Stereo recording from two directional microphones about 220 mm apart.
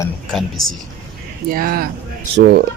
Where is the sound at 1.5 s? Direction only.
40° right (ahead or behind).